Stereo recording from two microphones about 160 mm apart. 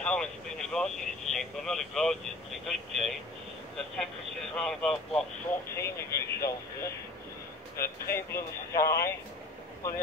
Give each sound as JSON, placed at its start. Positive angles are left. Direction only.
{"t": 0.0, "sound": "speech", "side_deg": 5}
{"t": 5.8, "sound": "speech", "side_deg": 15}